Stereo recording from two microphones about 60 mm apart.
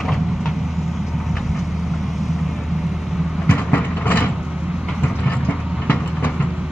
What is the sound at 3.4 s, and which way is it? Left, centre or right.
Train, left.